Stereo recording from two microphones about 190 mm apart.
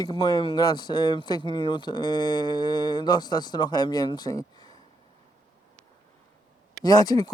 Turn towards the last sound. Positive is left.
turn(degrees=20)  # may be behind; listen again after turning